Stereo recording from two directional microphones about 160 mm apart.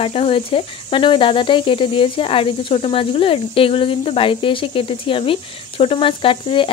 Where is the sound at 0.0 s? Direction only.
35° left (ahead or behind).